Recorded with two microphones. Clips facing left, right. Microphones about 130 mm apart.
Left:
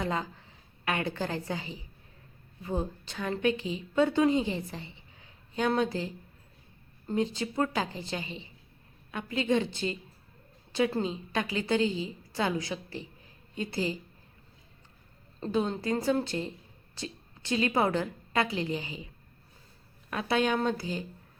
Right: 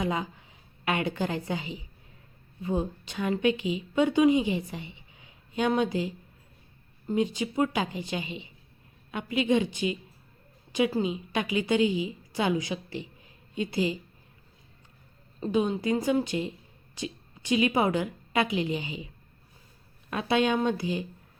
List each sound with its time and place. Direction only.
0.0 s a woman's voice: 15° right (ahead or behind)
7.2 s a woman's voice: 15° right (ahead or behind)
15.4 s speech: 10° right (ahead or behind)
20.1 s speech: 20° right (ahead or behind)